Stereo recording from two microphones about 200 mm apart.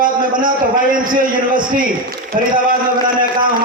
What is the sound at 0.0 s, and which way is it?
A man's voice, 45° right (ahead or behind).